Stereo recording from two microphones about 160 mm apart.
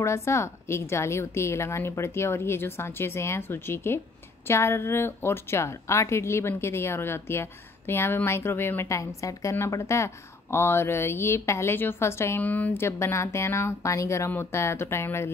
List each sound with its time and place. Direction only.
0.0 s speech: 15° left (ahead or behind)